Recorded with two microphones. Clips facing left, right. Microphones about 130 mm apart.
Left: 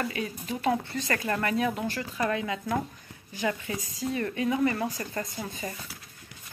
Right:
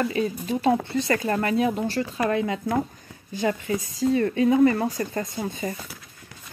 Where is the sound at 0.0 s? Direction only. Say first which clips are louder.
Right 7 dB; 30° right (ahead or behind).